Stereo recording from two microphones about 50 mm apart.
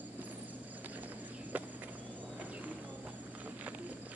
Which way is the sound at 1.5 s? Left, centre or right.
Right.